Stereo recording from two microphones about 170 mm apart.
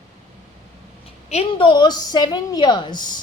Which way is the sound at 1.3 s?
35° left (ahead or behind).